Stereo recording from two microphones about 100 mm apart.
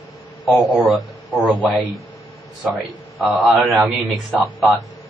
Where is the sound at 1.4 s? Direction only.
10° right (ahead or behind).